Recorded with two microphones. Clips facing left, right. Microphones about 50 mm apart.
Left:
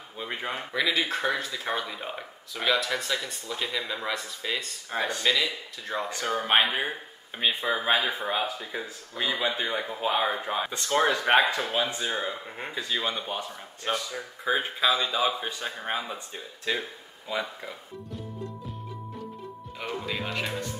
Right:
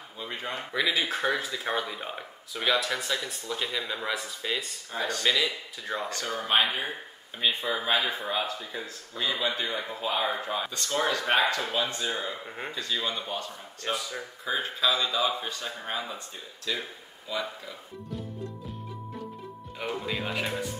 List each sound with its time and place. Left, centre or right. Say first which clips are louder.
0.2 s speech: left 2 dB; centre
0.7 s speech: left 1 dB; centre
4.9 s speech: left 2 dB; left
5.2 s speech: right 2 dB; centre
6.0 s speech: left 6 dB; centre
11.4 s speech: left 1 dB; centre
12.4 s speech: even; centre
12.7 s speech: left 2 dB; centre
16.7 s speech: left 3 dB; left
19.8 s speech: right 1 dB; centre